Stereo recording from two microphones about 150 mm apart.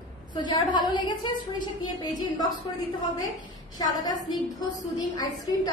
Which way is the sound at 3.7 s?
25° left (ahead or behind).